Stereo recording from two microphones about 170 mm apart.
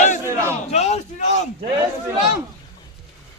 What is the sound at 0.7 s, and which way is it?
Speech, 40° left (ahead or behind).